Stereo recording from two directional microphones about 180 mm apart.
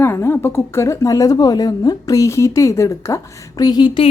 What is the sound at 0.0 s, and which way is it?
A woman's voice, 15° left (ahead or behind).